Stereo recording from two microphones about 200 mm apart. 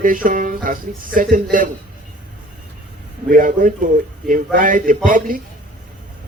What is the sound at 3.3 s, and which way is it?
A man's voice, 45° right (ahead or behind).